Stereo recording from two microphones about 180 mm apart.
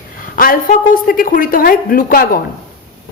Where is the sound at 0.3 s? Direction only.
50° left (ahead or behind).